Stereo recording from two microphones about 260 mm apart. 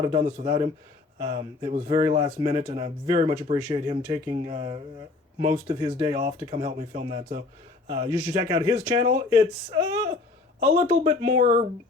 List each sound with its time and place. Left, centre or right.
0.0 s speech: right
7.9 s speech: centre
10.8 s speech: right